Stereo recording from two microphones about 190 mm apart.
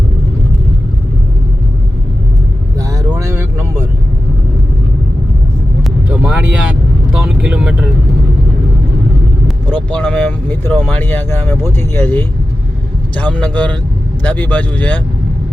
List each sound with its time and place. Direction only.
2.7 s vehicle: 20° right (ahead or behind)
5.8 s vehicle: 5° right (ahead or behind)
9.6 s vehicle: 10° left (ahead or behind)
13.1 s speech: 10° left (ahead or behind)